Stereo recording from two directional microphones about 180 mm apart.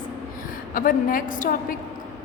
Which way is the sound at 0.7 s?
50° left (ahead or behind).